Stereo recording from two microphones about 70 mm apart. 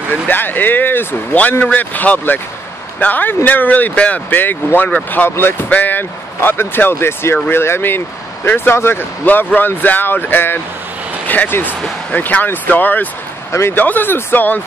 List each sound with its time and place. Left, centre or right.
0.1 s speech: left
13.5 s a man's voice: left
13.7 s speech: left